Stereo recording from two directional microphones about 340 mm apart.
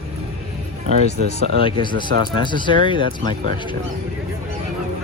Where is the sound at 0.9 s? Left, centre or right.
Right.